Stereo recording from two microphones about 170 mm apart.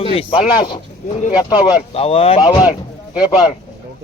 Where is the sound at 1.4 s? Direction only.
30° left (ahead or behind).